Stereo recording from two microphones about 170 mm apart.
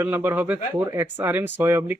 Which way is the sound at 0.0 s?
10° right (ahead or behind).